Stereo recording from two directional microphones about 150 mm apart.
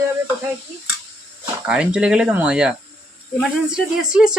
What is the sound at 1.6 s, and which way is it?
A woman's voice, 5° right (ahead or behind).